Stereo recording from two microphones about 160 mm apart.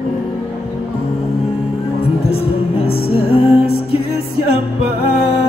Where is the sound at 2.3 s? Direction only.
40° left (ahead or behind).